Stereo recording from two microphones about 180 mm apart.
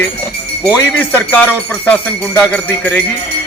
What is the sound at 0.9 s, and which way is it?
Speech, 10° left (ahead or behind).